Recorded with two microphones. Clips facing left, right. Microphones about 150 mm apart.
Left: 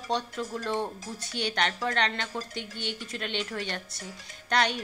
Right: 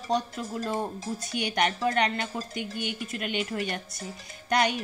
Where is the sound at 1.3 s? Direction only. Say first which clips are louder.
Right 2 dB; 10° right (ahead or behind).